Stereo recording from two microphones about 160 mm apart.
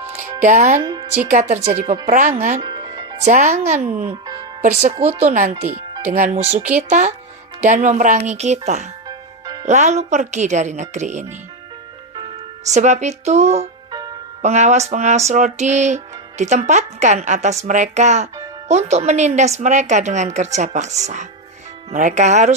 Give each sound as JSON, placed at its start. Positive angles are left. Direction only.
{"t": 0.2, "sound": "speech", "side_deg": -50}
{"t": 1.3, "sound": "music", "side_deg": -50}
{"t": 2.6, "sound": "music", "side_deg": -25}
{"t": 3.3, "sound": "music", "side_deg": -45}
{"t": 4.6, "sound": "speech", "side_deg": -50}
{"t": 5.0, "sound": "music", "side_deg": -50}
{"t": 12.6, "sound": "music", "side_deg": -45}